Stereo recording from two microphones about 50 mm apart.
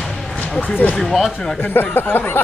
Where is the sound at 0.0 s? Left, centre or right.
Centre.